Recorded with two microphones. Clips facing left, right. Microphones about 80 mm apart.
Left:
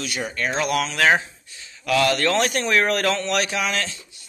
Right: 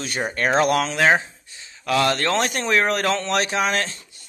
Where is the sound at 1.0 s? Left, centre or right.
Right.